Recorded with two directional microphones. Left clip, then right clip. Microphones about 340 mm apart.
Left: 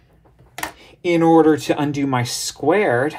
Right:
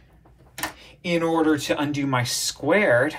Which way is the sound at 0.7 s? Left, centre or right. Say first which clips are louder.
Left 7 dB; left.